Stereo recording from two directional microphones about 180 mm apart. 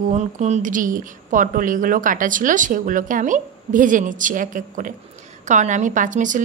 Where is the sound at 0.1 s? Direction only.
40° right (ahead or behind).